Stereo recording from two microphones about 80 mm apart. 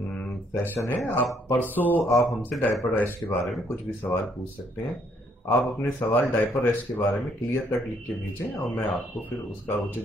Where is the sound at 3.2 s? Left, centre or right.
Centre.